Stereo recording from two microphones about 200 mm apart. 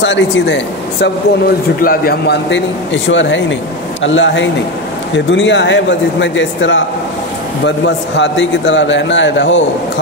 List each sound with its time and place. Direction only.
0.0 s a man's voice: 65° left (ahead or behind)
1.8 s a man's voice: 50° left (ahead or behind); by 9.6 s 65° left (ahead or behind)